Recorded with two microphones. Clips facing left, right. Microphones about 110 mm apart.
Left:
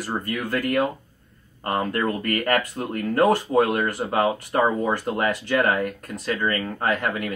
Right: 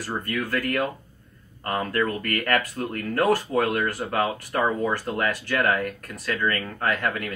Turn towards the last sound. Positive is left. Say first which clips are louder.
# left 2 dB
turn(degrees=20)  # may be behind; listen again after turning